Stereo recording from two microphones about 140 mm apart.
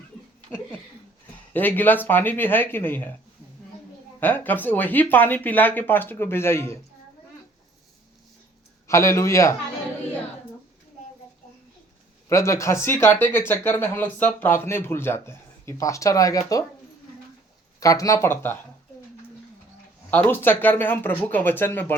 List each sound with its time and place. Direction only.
1.5 s speech: 15° left (ahead or behind)
4.2 s speech: 10° left (ahead or behind)
8.9 s speech: 20° left (ahead or behind)
12.3 s speech: 20° left (ahead or behind)
17.7 s speech: 25° left (ahead or behind)
20.1 s speech: 15° left (ahead or behind)